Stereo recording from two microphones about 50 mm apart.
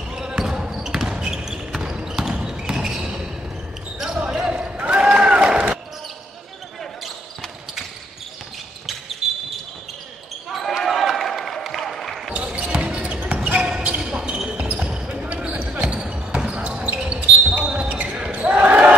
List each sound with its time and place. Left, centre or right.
0.1 s basketball bounce: centre
9.2 s basketball bounce: centre
10.9 s a sound: centre
11.8 s basketball bounce: centre
12.3 s basketball bounce: centre
15.2 s basketball bounce: right